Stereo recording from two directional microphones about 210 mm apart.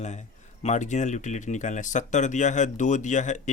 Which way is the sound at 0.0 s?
35° left (ahead or behind).